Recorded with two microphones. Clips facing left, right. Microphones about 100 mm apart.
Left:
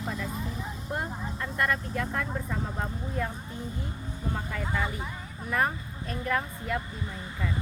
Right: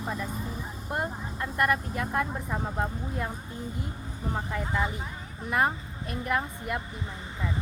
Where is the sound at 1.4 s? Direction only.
20° right (ahead or behind).